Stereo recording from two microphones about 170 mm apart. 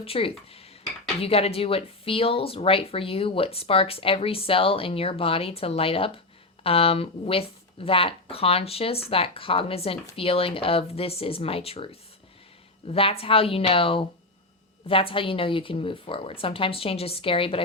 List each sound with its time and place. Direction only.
0.0 s dishes: 35° left (ahead or behind)
1.2 s speech: 35° left (ahead or behind)